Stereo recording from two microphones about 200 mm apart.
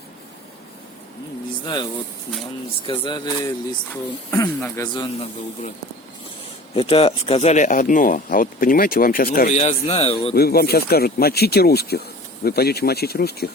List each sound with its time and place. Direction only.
1.6 s speech: 25° left (ahead or behind)
6.7 s speech: 30° left (ahead or behind); by 9.6 s 45° left (ahead or behind)
9.6 s speech: 30° left (ahead or behind)
10.3 s speech: 50° left (ahead or behind)